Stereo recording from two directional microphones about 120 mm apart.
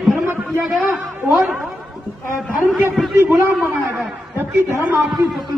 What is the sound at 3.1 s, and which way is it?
Speech, 20° right (ahead or behind).